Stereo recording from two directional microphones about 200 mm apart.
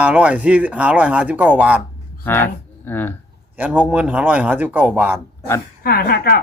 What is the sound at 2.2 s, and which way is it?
Speech, 10° left (ahead or behind).